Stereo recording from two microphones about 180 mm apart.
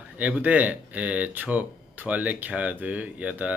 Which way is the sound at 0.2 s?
10° right (ahead or behind).